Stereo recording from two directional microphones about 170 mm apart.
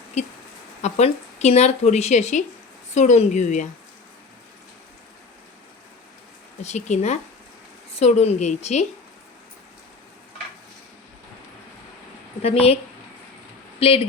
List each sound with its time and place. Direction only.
0.8 s speech: 40° left (ahead or behind)
6.6 s speech: 40° left (ahead or behind)
12.4 s speech: 35° left (ahead or behind)